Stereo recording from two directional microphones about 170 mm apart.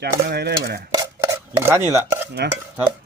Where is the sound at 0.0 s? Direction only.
70° right (ahead or behind).